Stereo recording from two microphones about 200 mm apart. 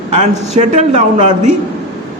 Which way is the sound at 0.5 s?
35° right (ahead or behind).